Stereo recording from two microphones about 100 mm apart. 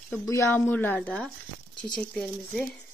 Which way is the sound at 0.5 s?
20° left (ahead or behind).